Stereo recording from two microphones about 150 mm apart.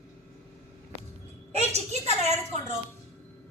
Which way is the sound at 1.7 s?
45° right (ahead or behind).